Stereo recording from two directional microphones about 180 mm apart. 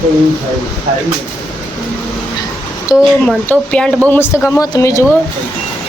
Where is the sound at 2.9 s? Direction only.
20° left (ahead or behind).